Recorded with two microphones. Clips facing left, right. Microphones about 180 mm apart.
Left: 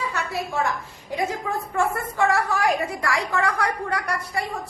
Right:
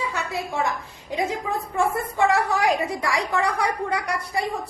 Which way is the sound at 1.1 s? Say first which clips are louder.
Right 1 dB; 15° right (ahead or behind).